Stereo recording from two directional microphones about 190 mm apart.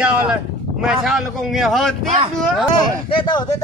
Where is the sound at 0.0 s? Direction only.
5° right (ahead or behind).